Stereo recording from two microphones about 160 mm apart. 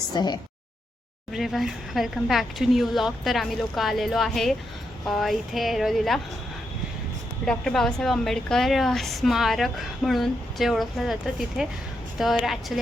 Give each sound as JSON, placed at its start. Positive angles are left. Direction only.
{"t": 0.1, "sound": "a sound", "side_deg": 25}
{"t": 1.3, "sound": "a woman's voice", "side_deg": 0}
{"t": 7.4, "sound": "a woman's voice", "side_deg": 0}